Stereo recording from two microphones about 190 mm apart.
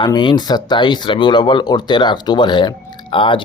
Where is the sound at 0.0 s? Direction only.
25° left (ahead or behind).